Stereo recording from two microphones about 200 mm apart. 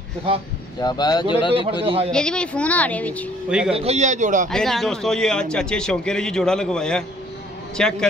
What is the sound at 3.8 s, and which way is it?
Speech, 35° right (ahead or behind).